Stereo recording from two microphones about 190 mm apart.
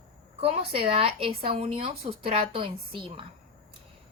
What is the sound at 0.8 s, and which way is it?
A woman's voice, 30° right (ahead or behind).